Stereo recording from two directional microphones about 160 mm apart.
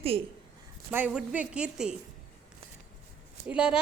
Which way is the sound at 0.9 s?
10° right (ahead or behind).